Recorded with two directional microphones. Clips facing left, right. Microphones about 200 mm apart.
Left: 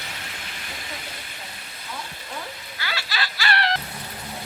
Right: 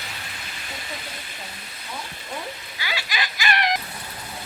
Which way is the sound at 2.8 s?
15° right (ahead or behind).